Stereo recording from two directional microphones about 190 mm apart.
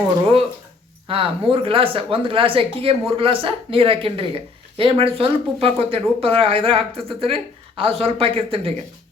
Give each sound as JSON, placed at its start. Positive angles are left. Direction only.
{"t": 1.0, "sound": "speech", "side_deg": -30}